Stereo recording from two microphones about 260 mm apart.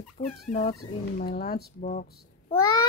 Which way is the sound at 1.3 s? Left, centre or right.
Left.